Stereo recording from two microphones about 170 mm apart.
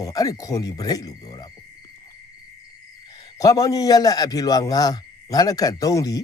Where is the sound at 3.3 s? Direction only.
20° left (ahead or behind).